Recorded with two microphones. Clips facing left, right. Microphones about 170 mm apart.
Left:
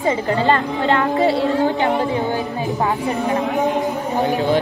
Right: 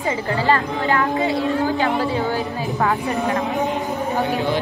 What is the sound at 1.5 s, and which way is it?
Speech, 20° left (ahead or behind).